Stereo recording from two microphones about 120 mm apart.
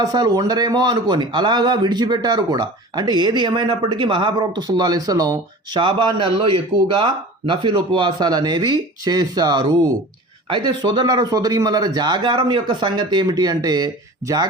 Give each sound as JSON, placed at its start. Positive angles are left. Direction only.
{"t": 0.0, "sound": "a man's voice", "side_deg": -35}